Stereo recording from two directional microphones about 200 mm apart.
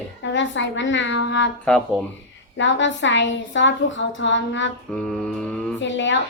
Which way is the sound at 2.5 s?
65° left (ahead or behind).